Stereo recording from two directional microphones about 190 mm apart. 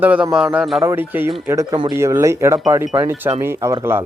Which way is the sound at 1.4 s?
15° right (ahead or behind).